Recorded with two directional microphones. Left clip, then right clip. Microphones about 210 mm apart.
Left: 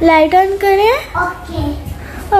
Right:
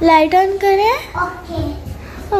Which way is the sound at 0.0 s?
10° right (ahead or behind).